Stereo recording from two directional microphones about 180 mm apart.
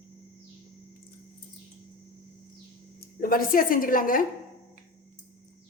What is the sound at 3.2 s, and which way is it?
Speech, 50° left (ahead or behind).